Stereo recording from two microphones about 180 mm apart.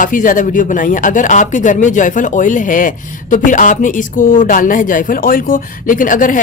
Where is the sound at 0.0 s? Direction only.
50° left (ahead or behind).